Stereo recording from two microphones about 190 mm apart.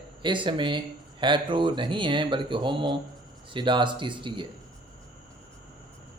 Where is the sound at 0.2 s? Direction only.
25° right (ahead or behind).